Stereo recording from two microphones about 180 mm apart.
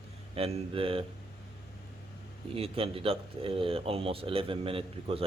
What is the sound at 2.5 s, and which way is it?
Speech, 30° right (ahead or behind).